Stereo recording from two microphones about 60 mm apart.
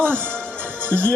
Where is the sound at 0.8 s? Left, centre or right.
Right.